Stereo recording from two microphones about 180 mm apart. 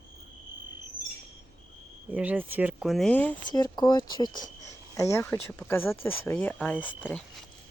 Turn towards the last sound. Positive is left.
turn(degrees=5)  # may be behind; listen again after turning